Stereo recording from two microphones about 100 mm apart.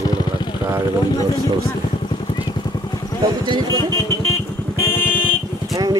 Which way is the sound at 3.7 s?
30° left (ahead or behind).